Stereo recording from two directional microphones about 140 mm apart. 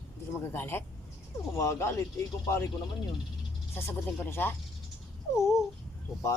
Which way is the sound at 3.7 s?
15° left (ahead or behind).